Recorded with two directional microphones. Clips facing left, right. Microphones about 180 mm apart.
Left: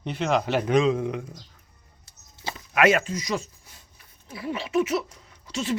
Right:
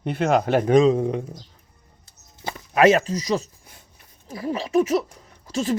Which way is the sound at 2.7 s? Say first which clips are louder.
Right 4 dB; 35° right (ahead or behind).